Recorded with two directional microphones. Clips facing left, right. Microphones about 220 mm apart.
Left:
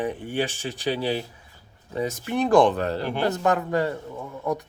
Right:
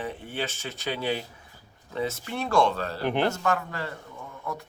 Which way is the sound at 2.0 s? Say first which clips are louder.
Left 5 dB; 15° left (ahead or behind).